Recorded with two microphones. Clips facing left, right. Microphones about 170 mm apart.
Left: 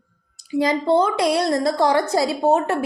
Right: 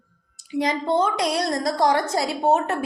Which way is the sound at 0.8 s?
30° left (ahead or behind).